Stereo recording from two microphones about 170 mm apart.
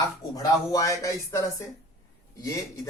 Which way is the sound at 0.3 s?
20° left (ahead or behind).